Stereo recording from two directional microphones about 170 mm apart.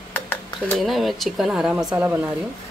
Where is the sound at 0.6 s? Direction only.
Centre (ahead or behind).